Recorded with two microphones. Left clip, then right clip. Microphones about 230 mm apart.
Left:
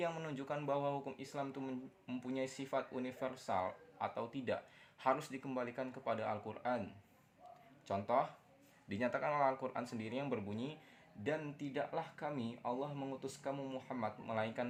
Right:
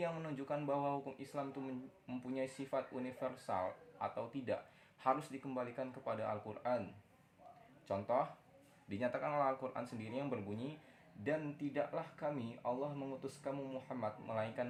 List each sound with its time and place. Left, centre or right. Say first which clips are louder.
0.0 s speech: left 1 dB; left
7.9 s speech: left 1 dB; left